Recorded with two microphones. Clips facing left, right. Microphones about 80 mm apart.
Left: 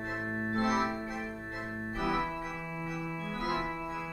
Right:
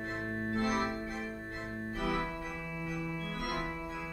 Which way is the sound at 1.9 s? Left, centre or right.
Left.